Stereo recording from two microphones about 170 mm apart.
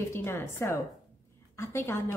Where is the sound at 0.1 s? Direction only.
15° left (ahead or behind).